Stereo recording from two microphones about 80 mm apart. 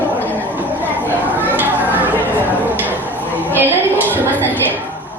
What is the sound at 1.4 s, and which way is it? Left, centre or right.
Children playing, right.